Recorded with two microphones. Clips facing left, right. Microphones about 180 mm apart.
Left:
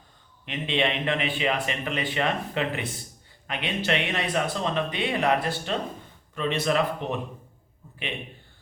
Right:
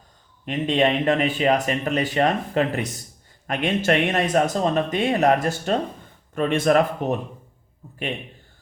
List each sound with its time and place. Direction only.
0.4 s a man's voice: 45° right (ahead or behind)